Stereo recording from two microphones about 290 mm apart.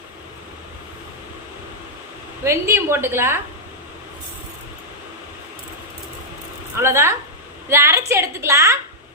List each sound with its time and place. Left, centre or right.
2.4 s a woman's voice: centre
6.7 s a woman's voice: centre